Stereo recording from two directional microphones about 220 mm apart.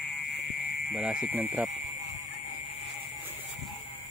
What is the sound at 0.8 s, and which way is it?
Speech, 5° right (ahead or behind).